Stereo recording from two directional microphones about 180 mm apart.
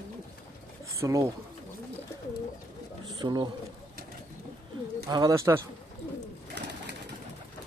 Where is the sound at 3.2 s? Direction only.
25° right (ahead or behind).